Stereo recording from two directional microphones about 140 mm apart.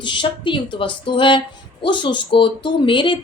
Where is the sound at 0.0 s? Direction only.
35° left (ahead or behind).